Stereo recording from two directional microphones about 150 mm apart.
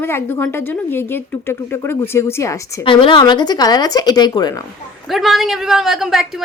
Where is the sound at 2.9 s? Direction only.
35° left (ahead or behind).